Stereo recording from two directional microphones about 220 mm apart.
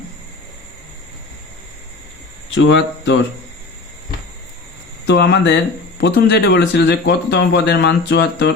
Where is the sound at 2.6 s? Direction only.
55° left (ahead or behind).